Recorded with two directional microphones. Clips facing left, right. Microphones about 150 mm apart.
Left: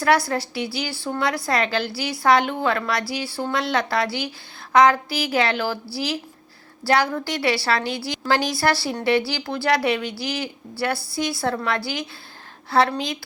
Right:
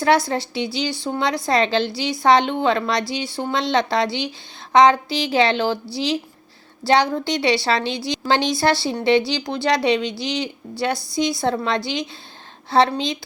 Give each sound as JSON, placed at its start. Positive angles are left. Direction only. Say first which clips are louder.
{"t": 0.0, "sound": "a woman's voice", "louder": "right 2 dB", "side_deg": -25}